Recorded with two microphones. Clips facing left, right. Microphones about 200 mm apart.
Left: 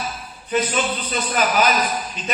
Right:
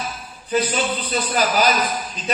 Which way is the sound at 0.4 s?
35° right (ahead or behind).